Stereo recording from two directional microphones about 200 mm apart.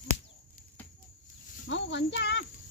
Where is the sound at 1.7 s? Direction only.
60° left (ahead or behind).